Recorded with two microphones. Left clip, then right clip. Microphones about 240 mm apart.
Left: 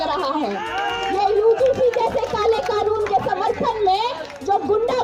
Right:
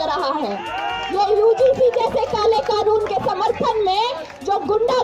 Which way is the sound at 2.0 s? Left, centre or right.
Right.